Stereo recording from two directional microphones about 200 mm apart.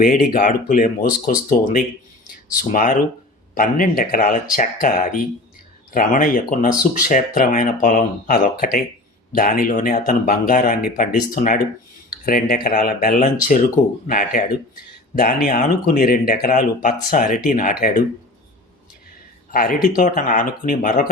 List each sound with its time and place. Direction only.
0.0 s speech: 45° left (ahead or behind)
19.5 s speech: 45° left (ahead or behind)